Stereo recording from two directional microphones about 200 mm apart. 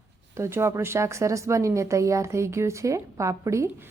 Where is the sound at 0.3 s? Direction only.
15° right (ahead or behind).